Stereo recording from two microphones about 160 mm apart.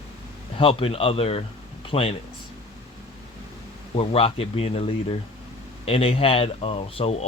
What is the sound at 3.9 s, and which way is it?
Speech, 35° left (ahead or behind).